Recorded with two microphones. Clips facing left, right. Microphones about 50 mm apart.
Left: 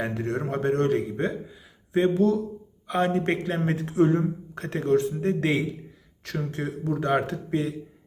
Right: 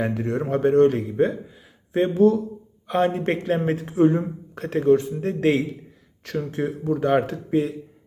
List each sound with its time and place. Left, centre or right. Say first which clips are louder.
0.0 s a man's voice: right 3 dB; centre; by 2.4 s right
2.8 s a man's voice: right 3 dB; centre